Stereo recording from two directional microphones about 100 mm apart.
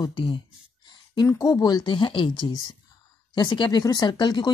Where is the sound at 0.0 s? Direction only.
55° left (ahead or behind).